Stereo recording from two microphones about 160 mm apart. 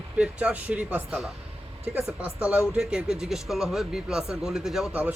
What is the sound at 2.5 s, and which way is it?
Speech, 5° right (ahead or behind).